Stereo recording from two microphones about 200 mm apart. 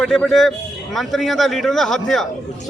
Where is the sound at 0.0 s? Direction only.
Centre (ahead or behind).